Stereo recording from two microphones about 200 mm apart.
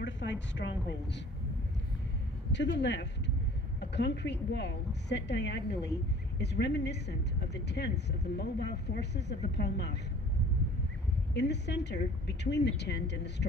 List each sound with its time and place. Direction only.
0.0 s a woman's voice: 65° left (ahead or behind)
2.5 s a woman's voice: 60° left (ahead or behind)
11.3 s a woman's voice: 60° left (ahead or behind)